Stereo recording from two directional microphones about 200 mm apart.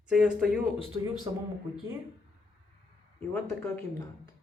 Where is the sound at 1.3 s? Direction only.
25° right (ahead or behind).